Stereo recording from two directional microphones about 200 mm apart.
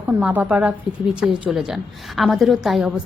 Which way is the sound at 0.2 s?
5° right (ahead or behind).